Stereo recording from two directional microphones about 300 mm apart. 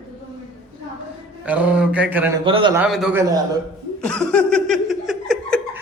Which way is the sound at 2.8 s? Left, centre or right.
Centre.